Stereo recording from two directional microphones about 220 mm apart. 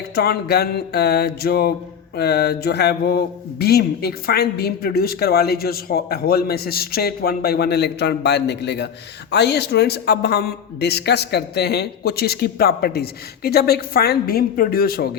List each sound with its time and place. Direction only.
0.1 s speech: 45° left (ahead or behind)